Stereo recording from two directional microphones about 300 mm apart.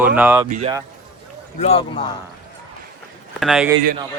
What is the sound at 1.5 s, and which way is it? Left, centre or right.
Speech, centre.